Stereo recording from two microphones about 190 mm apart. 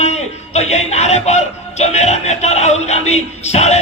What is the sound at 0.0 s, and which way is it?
A man's voice, 35° left (ahead or behind).